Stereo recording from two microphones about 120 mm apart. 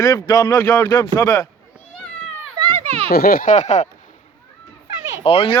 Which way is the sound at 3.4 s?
85° left.